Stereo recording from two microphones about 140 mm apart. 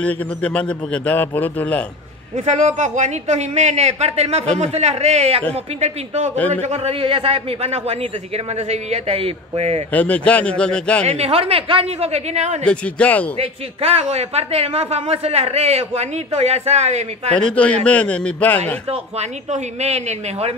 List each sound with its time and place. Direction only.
0.0 s a man's voice: 10° left (ahead or behind)
2.3 s a man's voice: 55° right (ahead or behind)
9.9 s a man's voice: 10° left (ahead or behind)
11.1 s a man's voice: 50° right (ahead or behind)
12.6 s a man's voice: 10° left (ahead or behind)
13.4 s a man's voice: 45° right (ahead or behind)
17.4 s a man's voice: 10° left (ahead or behind)
18.9 s a man's voice: 50° right (ahead or behind)